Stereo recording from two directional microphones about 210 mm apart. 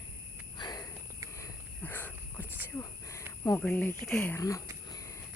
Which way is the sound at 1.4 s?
10° left (ahead or behind).